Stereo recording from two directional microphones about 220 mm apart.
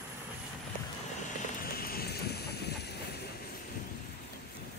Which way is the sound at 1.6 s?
45° left (ahead or behind).